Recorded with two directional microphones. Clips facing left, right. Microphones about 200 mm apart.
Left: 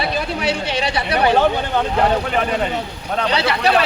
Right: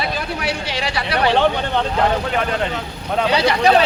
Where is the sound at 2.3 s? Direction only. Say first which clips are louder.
Left 1 dB; centre (ahead or behind).